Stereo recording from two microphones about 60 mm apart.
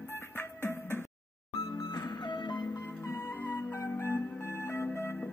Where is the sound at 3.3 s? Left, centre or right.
Left.